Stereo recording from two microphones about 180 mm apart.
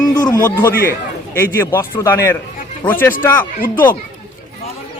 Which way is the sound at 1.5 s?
15° left (ahead or behind).